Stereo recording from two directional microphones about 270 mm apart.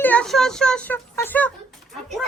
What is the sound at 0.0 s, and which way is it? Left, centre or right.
A child's voice, centre.